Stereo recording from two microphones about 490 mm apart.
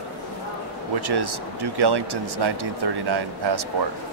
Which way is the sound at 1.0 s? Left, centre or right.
Right.